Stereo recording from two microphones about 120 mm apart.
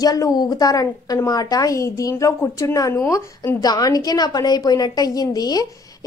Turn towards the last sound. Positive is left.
turn(degrees=30)  # may be behind; listen again after turning